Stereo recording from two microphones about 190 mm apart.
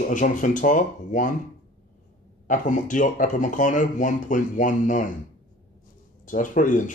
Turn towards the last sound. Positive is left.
turn(degrees=45)  # may be behind; listen again after turning